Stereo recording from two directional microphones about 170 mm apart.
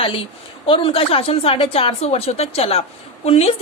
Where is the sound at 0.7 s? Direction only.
30° left (ahead or behind).